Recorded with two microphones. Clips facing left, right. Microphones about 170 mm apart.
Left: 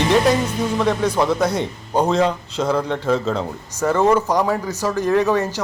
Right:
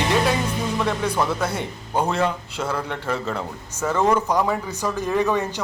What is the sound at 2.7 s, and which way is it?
Speech, 15° left (ahead or behind).